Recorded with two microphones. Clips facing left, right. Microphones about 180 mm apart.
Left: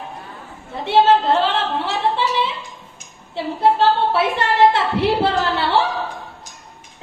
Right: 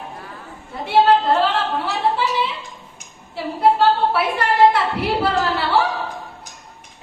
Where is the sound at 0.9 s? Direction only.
25° left (ahead or behind).